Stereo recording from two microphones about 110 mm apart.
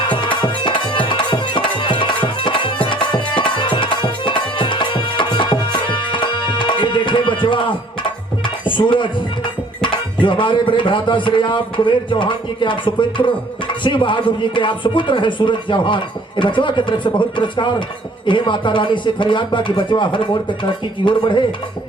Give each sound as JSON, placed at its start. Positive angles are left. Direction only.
{"t": 0.1, "sound": "music", "side_deg": 45}
{"t": 2.8, "sound": "tabla", "side_deg": 50}
{"t": 3.3, "sound": "music", "side_deg": 45}
{"t": 9.8, "sound": "speech", "side_deg": 50}